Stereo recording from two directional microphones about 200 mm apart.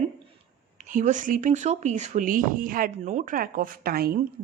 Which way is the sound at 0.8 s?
40° right (ahead or behind).